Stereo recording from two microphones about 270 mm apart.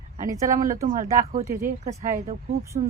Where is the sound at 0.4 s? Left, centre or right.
Right.